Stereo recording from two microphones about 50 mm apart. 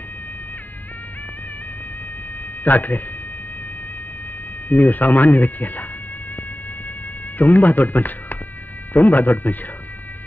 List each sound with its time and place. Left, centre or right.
2.6 s speech: left
4.6 s speech: left
7.3 s speech: left